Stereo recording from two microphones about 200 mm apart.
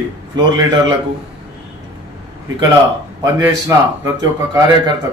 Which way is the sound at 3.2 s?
15° right (ahead or behind).